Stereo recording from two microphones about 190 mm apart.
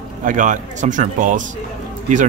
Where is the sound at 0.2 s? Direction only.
45° right (ahead or behind).